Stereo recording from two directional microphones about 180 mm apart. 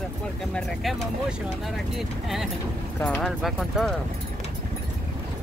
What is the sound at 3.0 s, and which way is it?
Speech, 5° left (ahead or behind).